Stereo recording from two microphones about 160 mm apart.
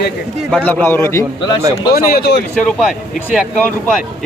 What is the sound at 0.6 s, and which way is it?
Speech, 10° left (ahead or behind).